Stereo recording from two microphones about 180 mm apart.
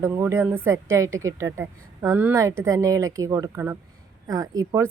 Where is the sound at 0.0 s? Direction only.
15° right (ahead or behind).